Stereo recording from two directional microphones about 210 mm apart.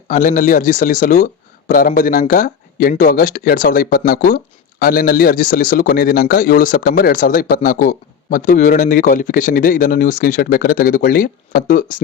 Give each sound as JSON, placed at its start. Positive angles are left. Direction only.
{"t": 0.1, "sound": "a man's voice", "side_deg": 40}